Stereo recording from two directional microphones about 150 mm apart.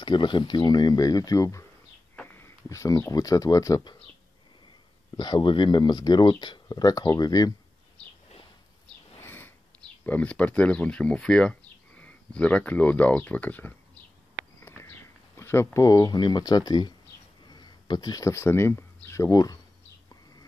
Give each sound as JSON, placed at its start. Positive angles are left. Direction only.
{"t": 0.0, "sound": "speech", "side_deg": 30}
{"t": 5.1, "sound": "speech", "side_deg": 30}
{"t": 9.2, "sound": "speech", "side_deg": 15}
{"t": 14.6, "sound": "a sound", "side_deg": 15}
{"t": 17.5, "sound": "speech", "side_deg": 30}